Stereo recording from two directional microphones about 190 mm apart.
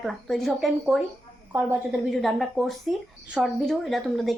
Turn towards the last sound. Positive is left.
turn(degrees=0)  # may be behind; listen again after turning